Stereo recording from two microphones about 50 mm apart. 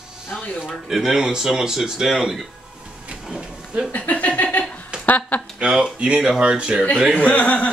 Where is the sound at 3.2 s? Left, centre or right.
Centre.